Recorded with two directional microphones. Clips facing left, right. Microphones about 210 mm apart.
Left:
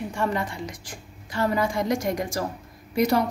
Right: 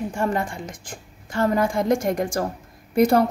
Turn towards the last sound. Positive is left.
turn(degrees=-50)  # may be behind; listen again after turning